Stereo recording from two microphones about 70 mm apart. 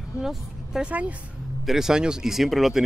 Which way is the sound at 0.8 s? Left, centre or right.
Centre.